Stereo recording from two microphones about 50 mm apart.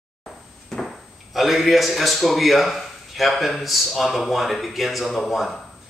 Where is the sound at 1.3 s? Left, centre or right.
Centre.